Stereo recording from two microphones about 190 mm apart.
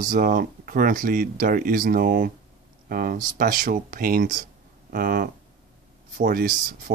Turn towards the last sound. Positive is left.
turn(degrees=-50)  # may be behind; listen again after turning